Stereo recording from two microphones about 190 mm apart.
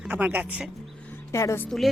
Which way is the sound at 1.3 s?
15° left (ahead or behind).